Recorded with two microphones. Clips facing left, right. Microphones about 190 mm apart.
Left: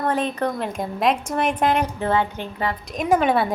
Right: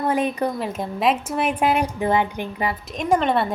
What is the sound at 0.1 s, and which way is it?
A woman's voice, 10° right (ahead or behind).